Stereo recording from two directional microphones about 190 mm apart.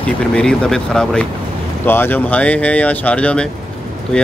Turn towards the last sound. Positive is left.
turn(degrees=5)  # may be behind; listen again after turning